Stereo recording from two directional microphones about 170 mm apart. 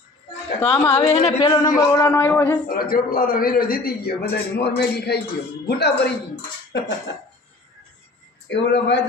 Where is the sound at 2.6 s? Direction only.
60° left (ahead or behind).